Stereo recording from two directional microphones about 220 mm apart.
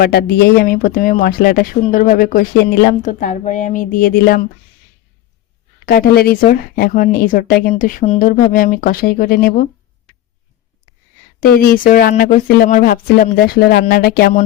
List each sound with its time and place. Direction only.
0.0 s speech: 45° left (ahead or behind)
5.8 s speech: 45° left (ahead or behind)
11.3 s speech: 40° left (ahead or behind)